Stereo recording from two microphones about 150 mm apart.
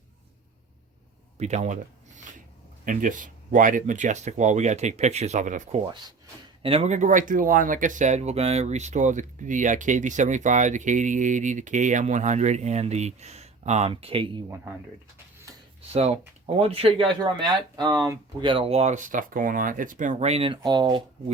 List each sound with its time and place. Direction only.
1.4 s speech: 50° right (ahead or behind)
5.8 s speech: 30° right (ahead or behind)
6.6 s speech: 40° right (ahead or behind)
15.9 s speech: 45° right (ahead or behind)
17.2 s speech: 25° right (ahead or behind)
20.6 s speech: 30° right (ahead or behind)